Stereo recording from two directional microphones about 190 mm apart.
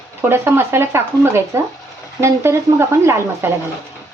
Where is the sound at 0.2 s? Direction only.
10° right (ahead or behind).